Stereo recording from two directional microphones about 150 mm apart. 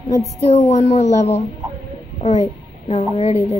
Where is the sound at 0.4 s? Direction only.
45° left (ahead or behind).